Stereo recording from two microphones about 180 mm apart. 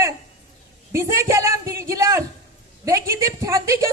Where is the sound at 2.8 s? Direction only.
15° right (ahead or behind).